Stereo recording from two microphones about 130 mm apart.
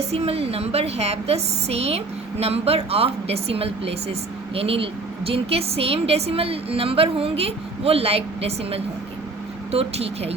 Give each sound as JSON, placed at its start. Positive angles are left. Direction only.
{"t": 0.0, "sound": "a woman's voice", "side_deg": -55}